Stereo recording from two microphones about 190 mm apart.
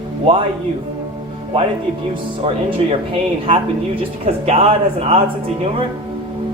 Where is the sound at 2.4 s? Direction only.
30° right (ahead or behind).